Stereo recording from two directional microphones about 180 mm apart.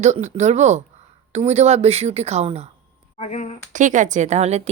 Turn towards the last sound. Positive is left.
turn(degrees=-35)  # may be behind; listen again after turning